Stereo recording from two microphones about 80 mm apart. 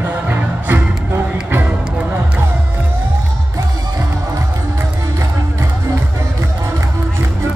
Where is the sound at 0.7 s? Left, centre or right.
Right.